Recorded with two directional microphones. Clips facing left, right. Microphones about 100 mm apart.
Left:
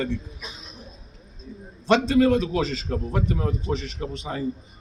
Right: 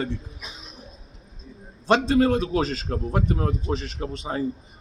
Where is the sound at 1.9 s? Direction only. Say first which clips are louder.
Left 1 dB; 35° right (ahead or behind).